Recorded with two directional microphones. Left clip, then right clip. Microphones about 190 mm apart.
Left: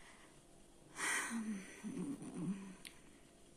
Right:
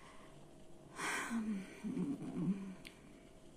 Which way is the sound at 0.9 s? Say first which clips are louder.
Even; 5° left (ahead or behind).